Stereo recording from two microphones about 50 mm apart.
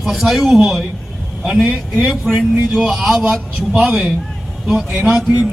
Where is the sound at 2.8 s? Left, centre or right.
Centre.